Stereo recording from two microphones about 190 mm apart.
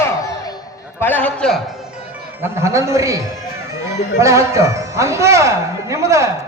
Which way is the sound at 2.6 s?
15° right (ahead or behind).